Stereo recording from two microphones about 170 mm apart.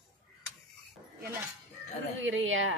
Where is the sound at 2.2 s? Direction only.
90° right.